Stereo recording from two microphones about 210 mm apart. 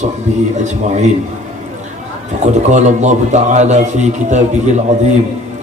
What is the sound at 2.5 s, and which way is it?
A man's voice, 35° right (ahead or behind).